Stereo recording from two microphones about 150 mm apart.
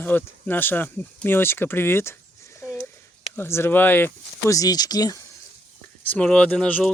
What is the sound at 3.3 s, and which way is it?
Speech, 15° left (ahead or behind).